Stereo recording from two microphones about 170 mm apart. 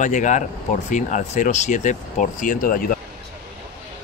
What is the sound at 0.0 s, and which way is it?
Speech, 45° left (ahead or behind).